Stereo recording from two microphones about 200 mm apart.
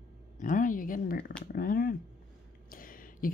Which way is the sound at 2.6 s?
45° left (ahead or behind).